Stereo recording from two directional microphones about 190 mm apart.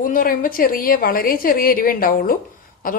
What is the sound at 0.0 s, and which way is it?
A woman's voice, 45° left (ahead or behind).